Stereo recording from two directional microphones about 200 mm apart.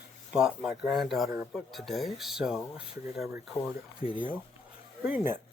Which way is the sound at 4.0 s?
25° left (ahead or behind).